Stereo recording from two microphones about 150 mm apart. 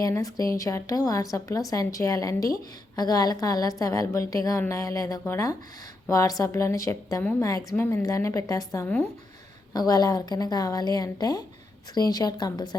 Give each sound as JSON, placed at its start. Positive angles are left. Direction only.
{"t": 0.0, "sound": "a woman's voice", "side_deg": 25}